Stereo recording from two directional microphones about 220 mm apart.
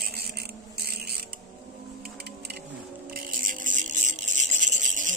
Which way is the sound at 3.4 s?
35° right (ahead or behind).